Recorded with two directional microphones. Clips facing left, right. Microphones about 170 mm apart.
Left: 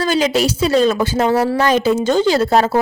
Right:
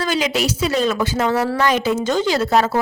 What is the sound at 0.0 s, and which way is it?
A woman's voice, 35° left (ahead or behind).